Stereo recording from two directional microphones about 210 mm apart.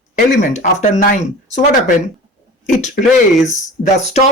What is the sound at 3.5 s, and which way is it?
Speech, 35° left (ahead or behind).